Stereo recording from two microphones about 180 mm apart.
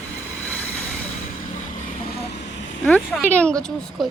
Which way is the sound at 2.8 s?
5° left (ahead or behind).